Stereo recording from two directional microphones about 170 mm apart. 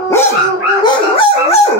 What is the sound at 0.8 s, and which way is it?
Dog, 30° left (ahead or behind).